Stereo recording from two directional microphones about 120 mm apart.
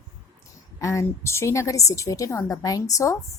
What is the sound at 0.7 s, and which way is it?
A woman's voice, 25° left (ahead or behind).